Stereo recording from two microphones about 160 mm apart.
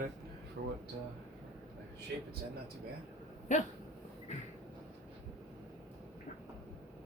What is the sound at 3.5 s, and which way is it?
Speech, 50° left (ahead or behind).